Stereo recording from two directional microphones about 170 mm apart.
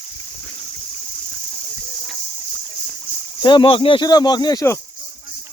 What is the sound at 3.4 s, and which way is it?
Speech, 30° left (ahead or behind).